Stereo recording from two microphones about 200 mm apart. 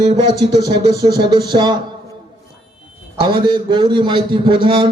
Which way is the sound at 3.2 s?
20° right (ahead or behind).